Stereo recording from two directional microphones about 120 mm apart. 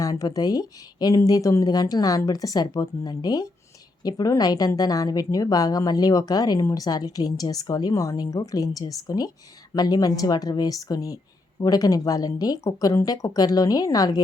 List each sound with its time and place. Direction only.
0.0 s a woman's voice: 30° left (ahead or behind)